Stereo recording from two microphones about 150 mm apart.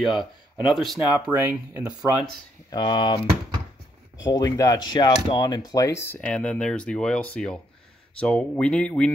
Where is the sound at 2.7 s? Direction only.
30° left (ahead or behind).